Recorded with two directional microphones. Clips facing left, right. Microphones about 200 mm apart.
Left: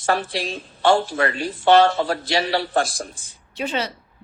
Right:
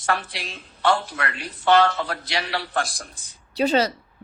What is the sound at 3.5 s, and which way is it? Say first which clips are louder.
Speech: right 6 dB; 35° right (ahead or behind).